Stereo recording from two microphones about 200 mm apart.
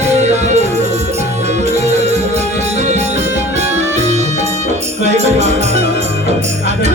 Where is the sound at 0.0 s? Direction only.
35° right (ahead or behind).